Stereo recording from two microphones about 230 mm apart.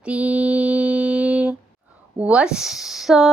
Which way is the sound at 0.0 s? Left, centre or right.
Centre.